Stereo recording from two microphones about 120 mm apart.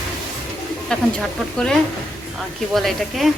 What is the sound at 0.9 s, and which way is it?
Speech, 5° left (ahead or behind).